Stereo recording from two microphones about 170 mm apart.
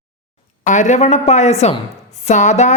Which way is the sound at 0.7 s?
45° left (ahead or behind).